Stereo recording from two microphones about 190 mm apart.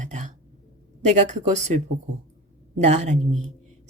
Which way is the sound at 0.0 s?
40° right (ahead or behind).